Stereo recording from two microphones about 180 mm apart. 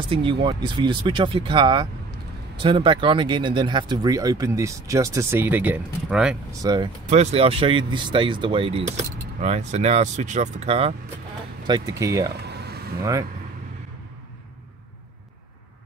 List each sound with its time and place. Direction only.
0.1 s speech: 30° right (ahead or behind); by 6.3 s 5° right (ahead or behind)
6.6 s speech: 25° right (ahead or behind)
7.1 s speech: 40° right (ahead or behind)
11.6 s speech: 20° right (ahead or behind)
12.4 s a sound: 65° right (ahead or behind)